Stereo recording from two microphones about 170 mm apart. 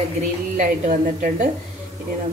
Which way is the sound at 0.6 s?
50° right (ahead or behind).